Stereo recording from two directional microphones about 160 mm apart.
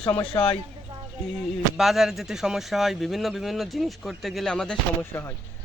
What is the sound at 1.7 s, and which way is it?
Speech, centre (ahead or behind).